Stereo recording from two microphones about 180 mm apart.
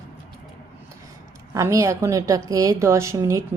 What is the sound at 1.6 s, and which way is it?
A woman's voice, 15° right (ahead or behind).